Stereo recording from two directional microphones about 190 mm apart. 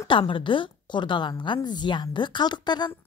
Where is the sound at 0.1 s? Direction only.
25° left (ahead or behind).